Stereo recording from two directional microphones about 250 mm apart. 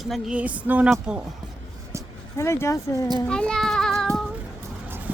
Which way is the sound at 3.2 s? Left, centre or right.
Centre.